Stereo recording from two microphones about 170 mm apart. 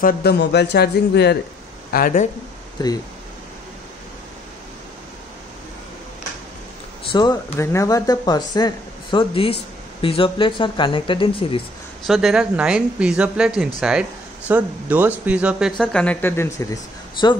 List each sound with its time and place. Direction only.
0.0 s speech: 70° left (ahead or behind)
1.9 s speech: 55° left (ahead or behind)
7.1 s speech: 25° left (ahead or behind)
12.1 s a woman's voice: centre (ahead or behind)
15.8 s speech: 5° left (ahead or behind); by 17.4 s 25° left (ahead or behind)